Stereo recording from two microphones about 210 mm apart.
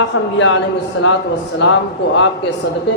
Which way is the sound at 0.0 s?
65° left (ahead or behind).